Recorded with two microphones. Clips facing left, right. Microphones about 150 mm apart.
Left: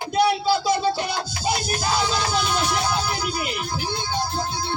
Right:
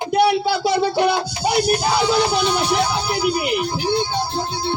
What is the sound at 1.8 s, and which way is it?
Speech, 60° right (ahead or behind).